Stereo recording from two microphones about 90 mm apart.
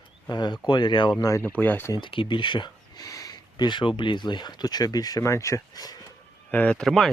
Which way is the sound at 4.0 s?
60° left (ahead or behind).